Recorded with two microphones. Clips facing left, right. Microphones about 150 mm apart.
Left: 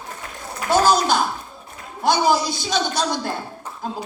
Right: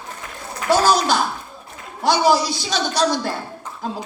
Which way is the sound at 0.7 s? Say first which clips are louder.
Even; 50° left (ahead or behind).